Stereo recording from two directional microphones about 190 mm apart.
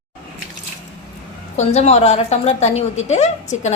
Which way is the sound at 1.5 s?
35° left (ahead or behind).